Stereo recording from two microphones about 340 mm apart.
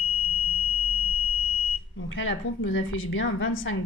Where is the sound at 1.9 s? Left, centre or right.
Left.